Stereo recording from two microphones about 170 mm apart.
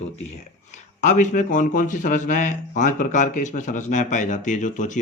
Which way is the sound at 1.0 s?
45° left (ahead or behind).